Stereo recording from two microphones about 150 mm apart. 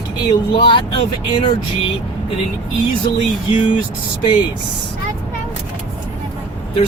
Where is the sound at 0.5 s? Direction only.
35° left (ahead or behind).